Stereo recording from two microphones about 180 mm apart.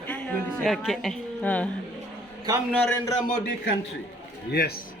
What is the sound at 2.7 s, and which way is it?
Speech, 10° left (ahead or behind).